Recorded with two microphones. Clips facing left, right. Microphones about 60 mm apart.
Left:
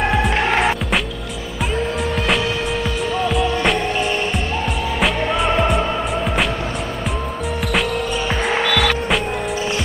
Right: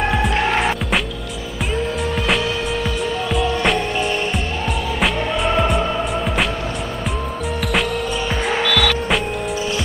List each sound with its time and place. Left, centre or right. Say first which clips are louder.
0.0 s music: left 1 dB; centre
3.3 s music: even; centre
5.5 s music: right 1 dB; centre
8.5 s music: even; centre